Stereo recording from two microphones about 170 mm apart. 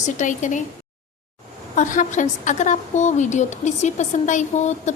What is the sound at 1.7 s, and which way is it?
A woman's voice, 50° left (ahead or behind).